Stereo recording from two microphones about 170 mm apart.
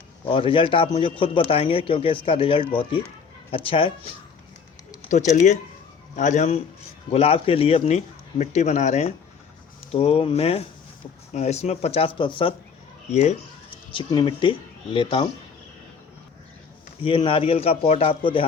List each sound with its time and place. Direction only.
0.3 s speech: 30° left (ahead or behind)
5.0 s speech: 45° left (ahead or behind); by 12.5 s 30° left (ahead or behind)
13.1 s speech: 40° left (ahead or behind)
13.9 s speech: 30° left (ahead or behind)
17.0 s speech: 30° left (ahead or behind)